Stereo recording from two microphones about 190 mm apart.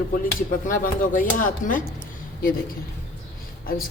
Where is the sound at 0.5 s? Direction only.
45° left (ahead or behind).